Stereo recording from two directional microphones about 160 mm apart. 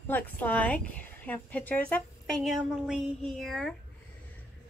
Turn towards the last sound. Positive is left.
turn(degrees=0)  # may be behind; listen again after turning